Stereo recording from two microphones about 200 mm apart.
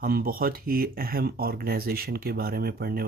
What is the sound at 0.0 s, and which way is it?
Speech, 45° right (ahead or behind).